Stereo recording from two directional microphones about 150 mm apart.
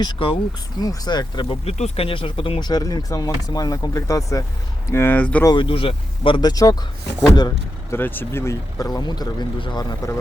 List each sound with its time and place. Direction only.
0.0 s speech: 30° left (ahead or behind)
1.6 s speech: 45° left (ahead or behind); by 5.5 s 10° left (ahead or behind)
5.5 s speech: 35° left (ahead or behind)
7.9 s speech: 15° left (ahead or behind)